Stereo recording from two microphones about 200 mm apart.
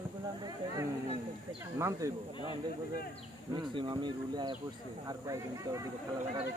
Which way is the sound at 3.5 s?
25° right (ahead or behind).